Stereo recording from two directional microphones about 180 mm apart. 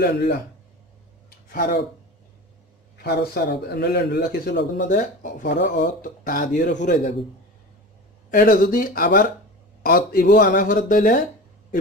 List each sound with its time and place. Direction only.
0.0 s a man's voice: 65° left (ahead or behind)
1.5 s speech: 50° left (ahead or behind)
3.0 s a man's voice: 65° left (ahead or behind)
4.8 s speech: 50° left (ahead or behind)
8.3 s speech: 50° left (ahead or behind)